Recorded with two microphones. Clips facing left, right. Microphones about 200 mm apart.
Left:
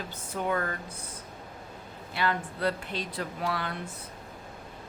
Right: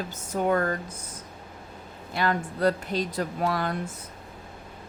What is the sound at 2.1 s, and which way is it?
Speech, 45° right (ahead or behind).